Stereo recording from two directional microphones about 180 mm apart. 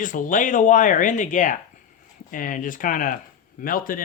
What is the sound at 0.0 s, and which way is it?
A man's voice, 45° left (ahead or behind).